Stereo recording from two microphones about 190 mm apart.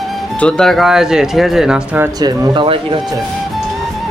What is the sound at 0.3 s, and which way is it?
Speech, 5° left (ahead or behind).